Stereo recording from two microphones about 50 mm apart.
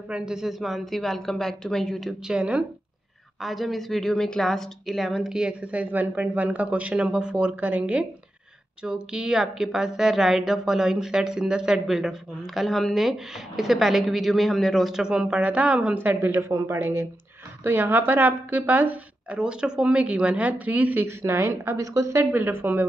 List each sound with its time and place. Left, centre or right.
0.1 s a woman's voice: centre
2.2 s speech: right
3.3 s a woman's voice: centre
5.3 s speech: centre
8.8 s a woman's voice: centre
11.9 s a woman's voice: centre
14.9 s speech: centre; by 16.3 s right
16.3 s a man's voice: right
16.6 s speech: right
21.2 s a woman's voice: right
22.2 s speech: right